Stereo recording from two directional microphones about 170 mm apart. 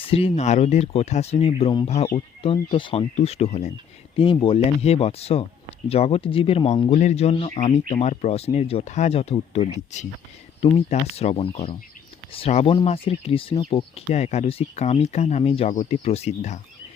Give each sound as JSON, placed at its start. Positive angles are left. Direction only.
{"t": 0.0, "sound": "speech", "side_deg": 35}
{"t": 6.9, "sound": "speech", "side_deg": 45}